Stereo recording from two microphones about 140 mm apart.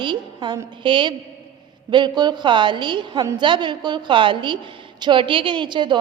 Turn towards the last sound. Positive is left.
turn(degrees=-35)  # may be behind; listen again after turning